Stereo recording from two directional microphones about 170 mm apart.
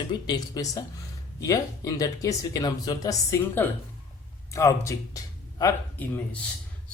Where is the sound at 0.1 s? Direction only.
25° left (ahead or behind).